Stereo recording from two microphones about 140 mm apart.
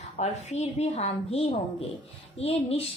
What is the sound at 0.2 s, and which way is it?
A woman's voice, 50° left (ahead or behind).